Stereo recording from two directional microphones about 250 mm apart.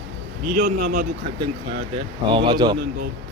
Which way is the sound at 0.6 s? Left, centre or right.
Right.